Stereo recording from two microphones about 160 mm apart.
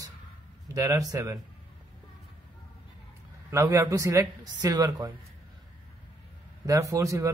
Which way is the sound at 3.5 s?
20° right (ahead or behind).